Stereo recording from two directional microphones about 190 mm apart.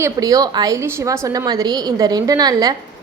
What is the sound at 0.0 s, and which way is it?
A woman's voice, 20° right (ahead or behind).